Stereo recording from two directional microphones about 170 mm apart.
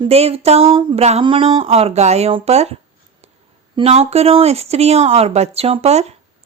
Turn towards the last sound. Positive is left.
turn(degrees=-40)  # may be behind; listen again after turning